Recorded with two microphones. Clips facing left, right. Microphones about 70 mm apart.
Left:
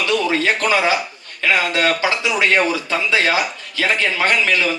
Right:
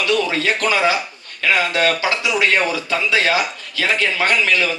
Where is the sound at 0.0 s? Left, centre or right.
Left.